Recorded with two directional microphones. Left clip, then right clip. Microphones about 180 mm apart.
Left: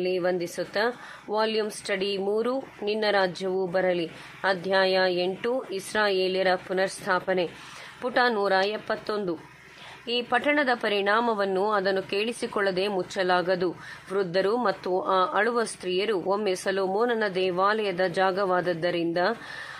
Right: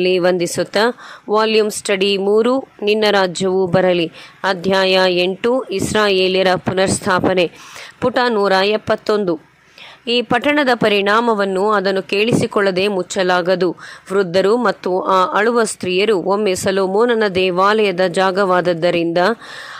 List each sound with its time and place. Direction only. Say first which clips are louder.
0.0 s speech: right 12 dB; 40° right (ahead or behind)